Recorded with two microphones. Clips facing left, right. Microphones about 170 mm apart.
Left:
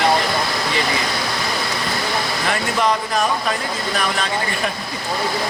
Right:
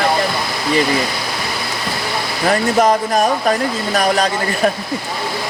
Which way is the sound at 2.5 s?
45° right (ahead or behind).